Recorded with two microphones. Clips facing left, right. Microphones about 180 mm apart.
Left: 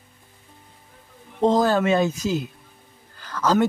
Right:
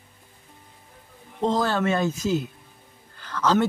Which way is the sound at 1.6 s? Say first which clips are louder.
Left 4 dB; 15° left (ahead or behind).